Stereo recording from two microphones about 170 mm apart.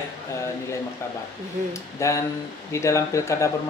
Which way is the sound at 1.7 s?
15° left (ahead or behind).